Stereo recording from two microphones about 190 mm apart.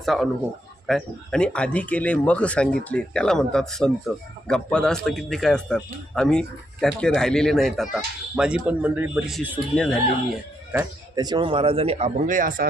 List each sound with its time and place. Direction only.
0.0 s speech: centre (ahead or behind)
10.7 s a sound: 10° right (ahead or behind)
11.2 s speech: 25° right (ahead or behind); by 12.6 s 45° right (ahead or behind)